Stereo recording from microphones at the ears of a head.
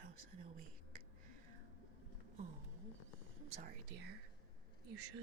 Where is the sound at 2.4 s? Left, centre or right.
Right.